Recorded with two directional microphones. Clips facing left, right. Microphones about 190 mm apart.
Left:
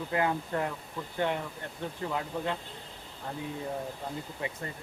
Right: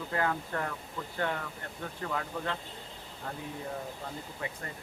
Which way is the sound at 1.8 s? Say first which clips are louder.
Left 2 dB; 20° left (ahead or behind).